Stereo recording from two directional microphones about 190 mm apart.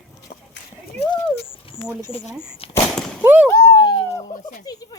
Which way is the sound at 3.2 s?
10° right (ahead or behind).